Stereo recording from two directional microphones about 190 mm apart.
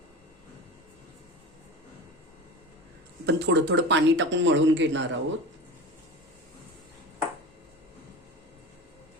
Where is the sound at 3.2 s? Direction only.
65° right (ahead or behind).